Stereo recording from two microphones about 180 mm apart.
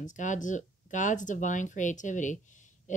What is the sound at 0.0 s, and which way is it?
Speech, 45° left (ahead or behind).